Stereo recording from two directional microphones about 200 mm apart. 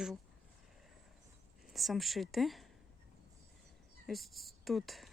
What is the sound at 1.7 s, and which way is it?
Speech, centre (ahead or behind).